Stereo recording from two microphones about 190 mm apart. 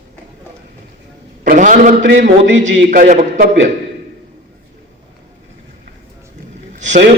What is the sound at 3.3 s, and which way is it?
Speech, 60° right (ahead or behind).